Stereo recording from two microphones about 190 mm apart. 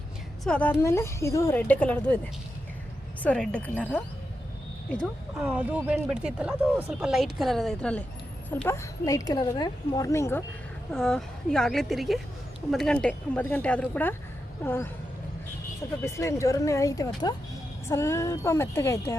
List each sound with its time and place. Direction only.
0.4 s speech: 5° left (ahead or behind)
3.2 s speech: 5° left (ahead or behind)
5.5 s speech: 10° right (ahead or behind); by 10.4 s 15° left (ahead or behind)
10.9 s speech: 5° left (ahead or behind)
16.0 s speech: 15° left (ahead or behind)